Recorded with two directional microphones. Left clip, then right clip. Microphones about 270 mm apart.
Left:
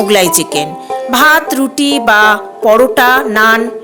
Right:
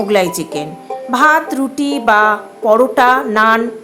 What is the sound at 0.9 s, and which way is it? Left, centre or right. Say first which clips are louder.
Music: left 6 dB; left.